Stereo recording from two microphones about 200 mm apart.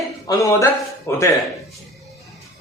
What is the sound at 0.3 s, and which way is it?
Speech, 15° left (ahead or behind).